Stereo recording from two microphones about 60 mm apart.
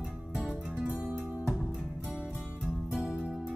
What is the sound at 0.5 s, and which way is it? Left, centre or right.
Music, right.